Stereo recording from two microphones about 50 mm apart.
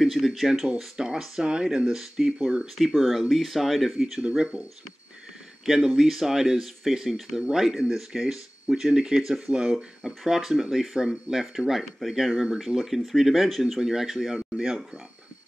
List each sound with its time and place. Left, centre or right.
0.0 s speech: centre
0.7 s speech: centre
2.8 s speech: centre
4.3 s speech: centre
5.7 s speech: centre